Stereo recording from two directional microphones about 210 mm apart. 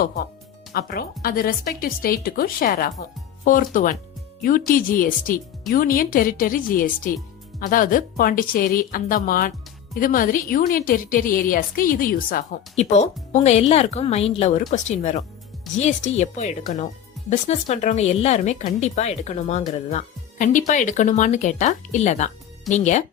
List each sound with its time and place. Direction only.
0.7 s speech: 45° left (ahead or behind)